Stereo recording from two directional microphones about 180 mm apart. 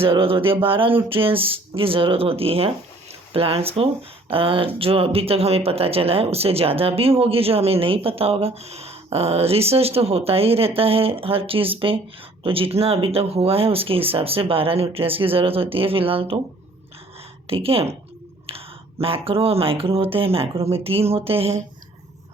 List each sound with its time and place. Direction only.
0.0 s speech: 30° right (ahead or behind)
17.4 s a woman's voice: 30° right (ahead or behind)